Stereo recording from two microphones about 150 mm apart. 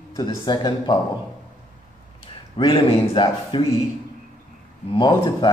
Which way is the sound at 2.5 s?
35° left (ahead or behind).